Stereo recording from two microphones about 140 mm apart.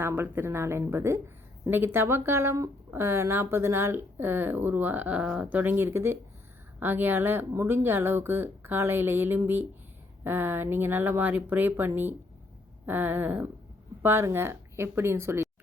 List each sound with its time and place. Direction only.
0.0 s a woman's voice: 15° right (ahead or behind)